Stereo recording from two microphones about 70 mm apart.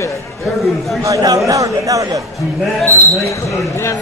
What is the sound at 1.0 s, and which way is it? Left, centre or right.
Speech, right.